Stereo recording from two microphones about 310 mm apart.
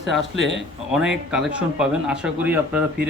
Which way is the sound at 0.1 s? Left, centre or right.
Centre.